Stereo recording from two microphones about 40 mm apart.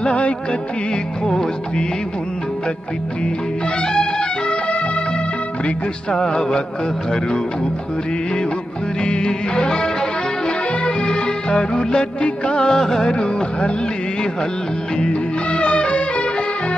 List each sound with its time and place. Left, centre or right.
0.0 s music: left
1.2 s music: centre
3.8 s music: centre
6.1 s music: centre
9.0 s music: left
12.7 s music: centre
15.0 s music: left